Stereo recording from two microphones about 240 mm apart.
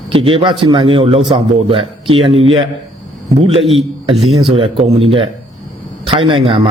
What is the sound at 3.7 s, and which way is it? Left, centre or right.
A man's voice, right.